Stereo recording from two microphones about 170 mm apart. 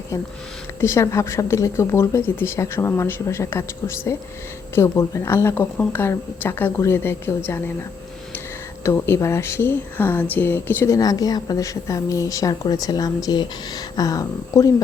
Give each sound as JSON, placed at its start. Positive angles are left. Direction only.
{"t": 0.8, "sound": "speech", "side_deg": 15}
{"t": 8.8, "sound": "speech", "side_deg": 15}